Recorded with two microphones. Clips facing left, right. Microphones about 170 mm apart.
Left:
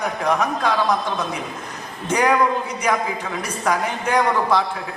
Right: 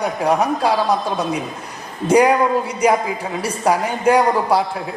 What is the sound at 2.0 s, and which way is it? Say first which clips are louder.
Speech: right 6 dB; 30° right (ahead or behind).